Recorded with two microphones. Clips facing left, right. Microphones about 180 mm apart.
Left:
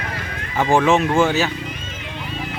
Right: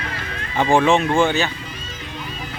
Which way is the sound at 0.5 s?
5° left (ahead or behind).